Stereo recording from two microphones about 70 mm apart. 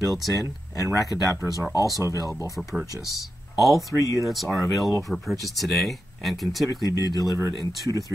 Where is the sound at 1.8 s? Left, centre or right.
Right.